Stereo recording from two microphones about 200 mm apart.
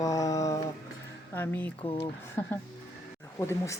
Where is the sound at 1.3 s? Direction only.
10° left (ahead or behind).